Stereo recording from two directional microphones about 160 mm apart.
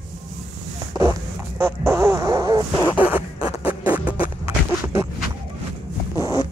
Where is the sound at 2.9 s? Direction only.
10° right (ahead or behind).